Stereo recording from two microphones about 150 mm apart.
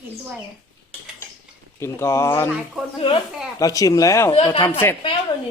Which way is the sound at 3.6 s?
25° left (ahead or behind).